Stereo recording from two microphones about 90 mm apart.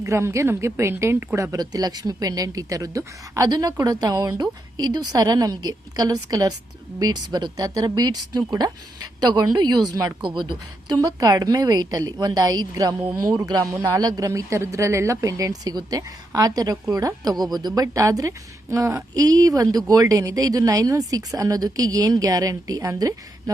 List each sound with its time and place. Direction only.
0.0 s speech: 30° right (ahead or behind)
1.4 s speech: 40° right (ahead or behind)
10.2 s a woman's voice: 60° right (ahead or behind)
11.0 s speech: 45° right (ahead or behind)